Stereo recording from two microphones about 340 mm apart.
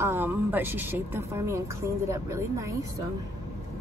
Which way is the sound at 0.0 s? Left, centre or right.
Centre.